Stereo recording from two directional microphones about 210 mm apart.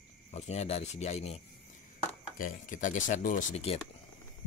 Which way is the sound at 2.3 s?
40° left (ahead or behind).